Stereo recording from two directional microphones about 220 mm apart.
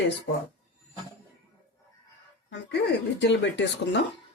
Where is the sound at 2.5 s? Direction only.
50° left (ahead or behind).